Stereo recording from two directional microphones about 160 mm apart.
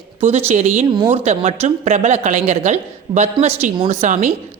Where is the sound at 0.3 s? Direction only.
40° right (ahead or behind).